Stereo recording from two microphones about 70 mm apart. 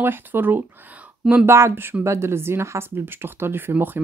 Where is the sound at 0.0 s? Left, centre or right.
Right.